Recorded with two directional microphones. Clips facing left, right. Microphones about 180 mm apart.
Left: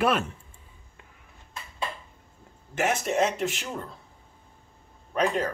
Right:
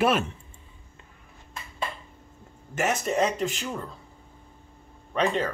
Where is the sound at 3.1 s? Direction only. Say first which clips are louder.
Right 1 dB; 5° left (ahead or behind).